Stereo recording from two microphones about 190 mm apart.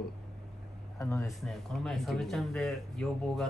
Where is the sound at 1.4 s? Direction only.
Centre (ahead or behind).